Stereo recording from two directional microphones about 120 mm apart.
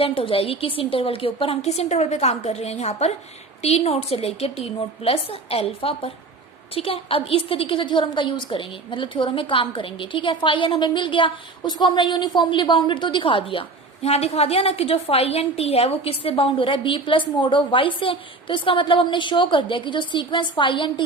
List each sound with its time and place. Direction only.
0.0 s a woman's voice: 50° left (ahead or behind)